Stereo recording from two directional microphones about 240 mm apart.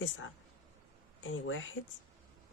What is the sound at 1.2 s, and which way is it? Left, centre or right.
Speech, left.